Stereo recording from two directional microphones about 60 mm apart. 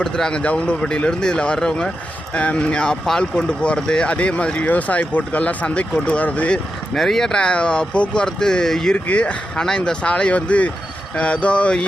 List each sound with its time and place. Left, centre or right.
0.0 s speech: centre
6.9 s speech: centre
9.0 s speech: left